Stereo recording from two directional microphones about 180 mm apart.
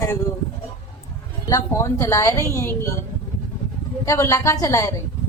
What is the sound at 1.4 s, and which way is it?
Speech, 15° left (ahead or behind).